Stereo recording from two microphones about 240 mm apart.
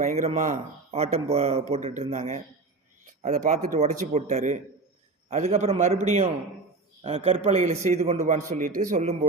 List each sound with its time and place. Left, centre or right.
0.0 s a man's voice: right